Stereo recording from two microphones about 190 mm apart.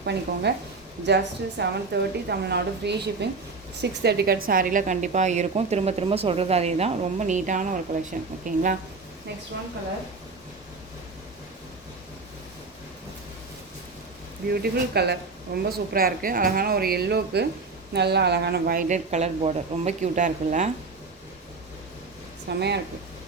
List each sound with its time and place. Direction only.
0.0 s a woman's voice: 60° right (ahead or behind); by 8.8 s 45° right (ahead or behind)
14.5 s a woman's voice: 55° right (ahead or behind); by 20.7 s 40° right (ahead or behind)
22.4 s a woman's voice: 60° right (ahead or behind)